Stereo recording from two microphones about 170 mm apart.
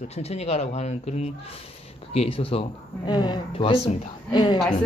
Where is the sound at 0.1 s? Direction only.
40° left (ahead or behind).